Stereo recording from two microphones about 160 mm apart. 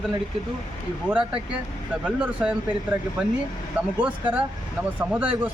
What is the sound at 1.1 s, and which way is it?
A man's voice, 10° right (ahead or behind).